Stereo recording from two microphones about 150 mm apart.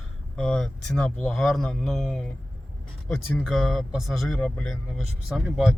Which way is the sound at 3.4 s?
Centre (ahead or behind).